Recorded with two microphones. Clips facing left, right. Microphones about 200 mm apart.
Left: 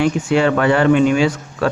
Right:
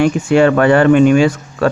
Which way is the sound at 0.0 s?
50° right (ahead or behind).